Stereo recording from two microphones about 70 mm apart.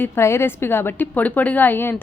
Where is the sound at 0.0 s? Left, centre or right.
Left.